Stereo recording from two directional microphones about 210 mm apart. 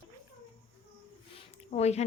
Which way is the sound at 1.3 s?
30° left (ahead or behind).